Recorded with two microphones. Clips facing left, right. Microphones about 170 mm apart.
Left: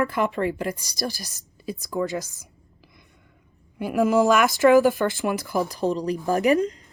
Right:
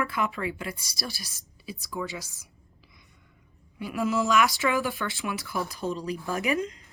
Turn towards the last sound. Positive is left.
turn(degrees=35)  # may be behind; listen again after turning